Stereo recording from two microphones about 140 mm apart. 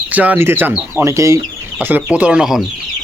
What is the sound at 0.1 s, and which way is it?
Speech, 10° right (ahead or behind).